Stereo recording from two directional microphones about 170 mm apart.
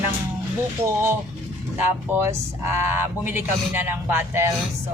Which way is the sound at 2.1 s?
15° right (ahead or behind).